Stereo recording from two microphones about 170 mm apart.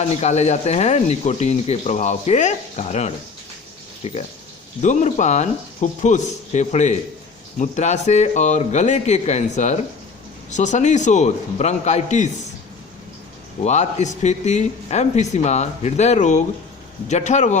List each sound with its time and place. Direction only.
0.0 s speech: 40° left (ahead or behind)
13.7 s speech: 45° left (ahead or behind)